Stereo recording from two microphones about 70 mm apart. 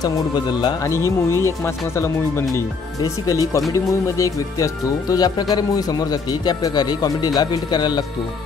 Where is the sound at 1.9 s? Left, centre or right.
Left.